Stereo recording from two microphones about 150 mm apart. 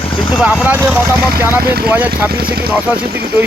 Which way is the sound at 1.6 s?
90° right.